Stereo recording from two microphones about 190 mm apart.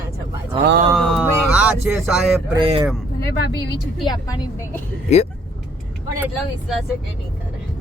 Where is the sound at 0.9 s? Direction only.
Centre (ahead or behind).